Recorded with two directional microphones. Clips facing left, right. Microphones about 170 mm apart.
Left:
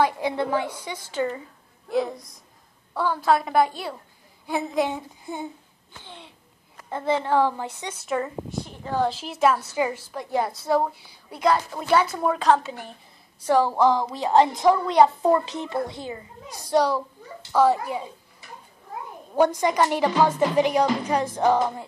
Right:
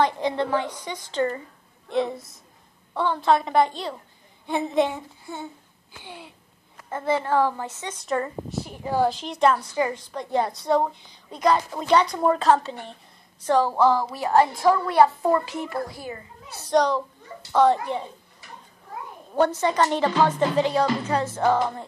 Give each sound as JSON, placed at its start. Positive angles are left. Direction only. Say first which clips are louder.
{"t": 0.0, "sound": "a woman's voice", "louder": "even", "side_deg": 10}
{"t": 4.9, "sound": "speech", "louder": "left 2 dB", "side_deg": 15}
{"t": 6.0, "sound": "a woman's voice", "louder": "right 4 dB", "side_deg": -5}
{"t": 6.9, "sound": "speech", "louder": "even", "side_deg": 15}
{"t": 8.0, "sound": "a woman's voice", "louder": "right 1 dB", "side_deg": 0}
{"t": 9.1, "sound": "a woman's voice", "louder": "right 1 dB", "side_deg": 5}
{"t": 19.3, "sound": "speech", "louder": "left 1 dB", "side_deg": 10}